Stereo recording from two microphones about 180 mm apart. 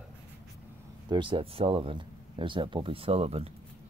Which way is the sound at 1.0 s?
25° right (ahead or behind).